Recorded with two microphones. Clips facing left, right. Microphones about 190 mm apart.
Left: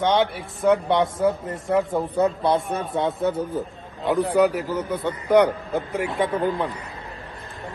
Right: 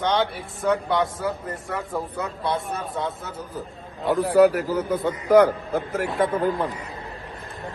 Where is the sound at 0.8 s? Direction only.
25° left (ahead or behind).